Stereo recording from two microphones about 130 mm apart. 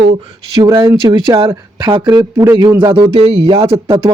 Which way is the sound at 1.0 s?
40° right (ahead or behind).